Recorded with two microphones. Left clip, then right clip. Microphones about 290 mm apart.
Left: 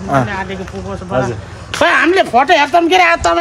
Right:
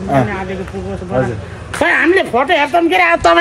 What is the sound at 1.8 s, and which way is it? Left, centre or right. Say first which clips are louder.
Speech: left 1 dB; centre.